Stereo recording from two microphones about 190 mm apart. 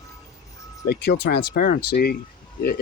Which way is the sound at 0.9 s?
55° left (ahead or behind).